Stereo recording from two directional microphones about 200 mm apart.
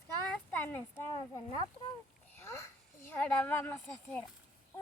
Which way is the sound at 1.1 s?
25° left (ahead or behind).